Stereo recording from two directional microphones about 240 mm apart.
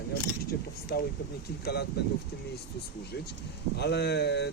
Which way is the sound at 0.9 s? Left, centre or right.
Left.